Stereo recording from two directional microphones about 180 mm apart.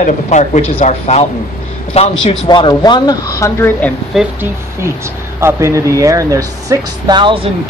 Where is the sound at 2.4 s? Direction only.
25° left (ahead or behind).